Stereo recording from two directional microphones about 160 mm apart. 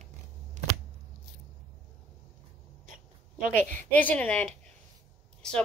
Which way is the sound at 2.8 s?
55° right (ahead or behind).